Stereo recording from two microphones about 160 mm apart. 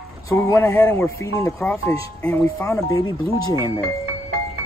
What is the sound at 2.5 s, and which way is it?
Speech, 20° left (ahead or behind).